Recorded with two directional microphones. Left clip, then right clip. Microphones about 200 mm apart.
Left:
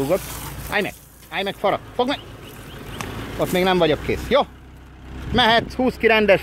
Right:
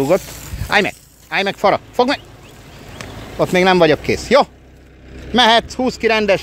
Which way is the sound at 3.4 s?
40° right (ahead or behind).